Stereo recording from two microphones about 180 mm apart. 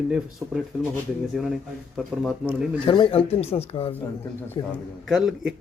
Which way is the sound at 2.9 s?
30° left (ahead or behind).